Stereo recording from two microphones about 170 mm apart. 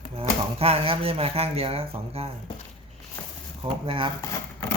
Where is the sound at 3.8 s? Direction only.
30° right (ahead or behind).